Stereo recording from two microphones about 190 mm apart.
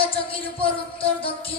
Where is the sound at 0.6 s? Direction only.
30° left (ahead or behind).